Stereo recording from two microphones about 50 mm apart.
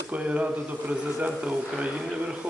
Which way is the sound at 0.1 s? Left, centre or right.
Right.